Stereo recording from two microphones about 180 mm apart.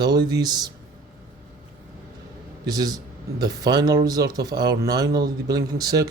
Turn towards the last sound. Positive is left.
turn(degrees=-20)  # may be behind; listen again after turning